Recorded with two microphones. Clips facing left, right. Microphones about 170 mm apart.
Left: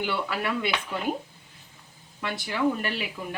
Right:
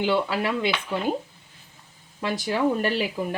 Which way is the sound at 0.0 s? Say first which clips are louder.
Right 5 dB; 25° right (ahead or behind).